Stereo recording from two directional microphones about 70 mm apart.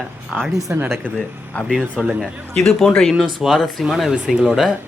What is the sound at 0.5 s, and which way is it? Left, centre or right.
Speech, right.